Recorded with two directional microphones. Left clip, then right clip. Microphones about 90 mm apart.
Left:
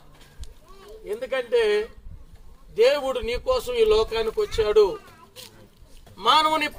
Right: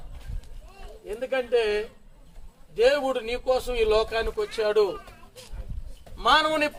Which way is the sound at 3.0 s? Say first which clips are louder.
Left 1 dB; 5° right (ahead or behind).